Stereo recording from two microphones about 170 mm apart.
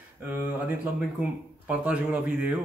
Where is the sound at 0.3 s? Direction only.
10° right (ahead or behind).